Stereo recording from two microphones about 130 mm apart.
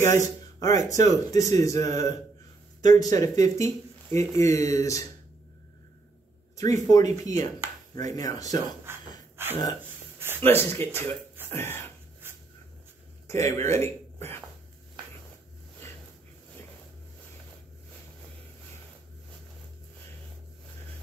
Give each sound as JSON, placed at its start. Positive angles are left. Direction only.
{"t": 0.0, "sound": "speech", "side_deg": 25}
{"t": 6.5, "sound": "speech", "side_deg": 25}
{"t": 8.9, "sound": "snort", "side_deg": -20}
{"t": 9.4, "sound": "a sound", "side_deg": -20}
{"t": 10.4, "sound": "speech", "side_deg": 15}
{"t": 12.2, "sound": "a sound", "side_deg": -15}
{"t": 13.3, "sound": "speech", "side_deg": 20}